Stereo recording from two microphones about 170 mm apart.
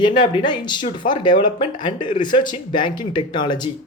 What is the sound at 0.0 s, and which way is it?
Speech, 30° left (ahead or behind).